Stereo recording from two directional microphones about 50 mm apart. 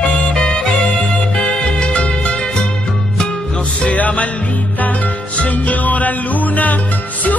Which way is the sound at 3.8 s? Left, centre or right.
Left.